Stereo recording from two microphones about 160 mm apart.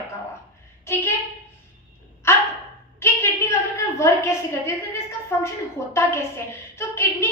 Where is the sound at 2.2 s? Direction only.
15° left (ahead or behind).